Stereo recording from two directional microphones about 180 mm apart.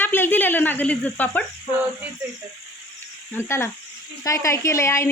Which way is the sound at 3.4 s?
15° left (ahead or behind).